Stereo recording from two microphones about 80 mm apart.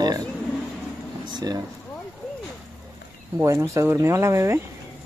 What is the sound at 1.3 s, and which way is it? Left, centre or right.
Speech, right.